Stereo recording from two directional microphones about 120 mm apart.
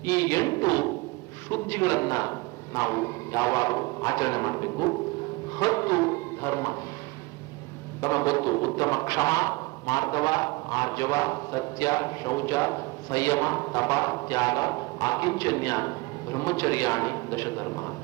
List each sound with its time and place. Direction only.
0.0 s speech: 25° left (ahead or behind)
1.5 s speech: 20° left (ahead or behind)
5.5 s a sound: 25° left (ahead or behind)
8.0 s speech: 25° left (ahead or behind)